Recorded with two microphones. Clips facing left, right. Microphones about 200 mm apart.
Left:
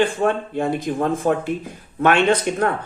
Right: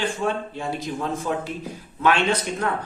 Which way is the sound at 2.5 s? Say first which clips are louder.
Left 6 dB; 60° left (ahead or behind).